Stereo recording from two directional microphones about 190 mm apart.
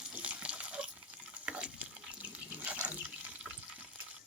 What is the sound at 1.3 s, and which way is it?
Water, 5° right (ahead or behind).